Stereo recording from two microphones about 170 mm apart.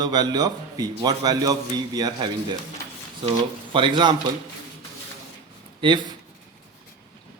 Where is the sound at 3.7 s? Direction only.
30° right (ahead or behind).